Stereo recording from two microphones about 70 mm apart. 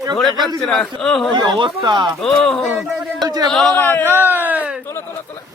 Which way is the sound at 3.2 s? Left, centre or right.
Right.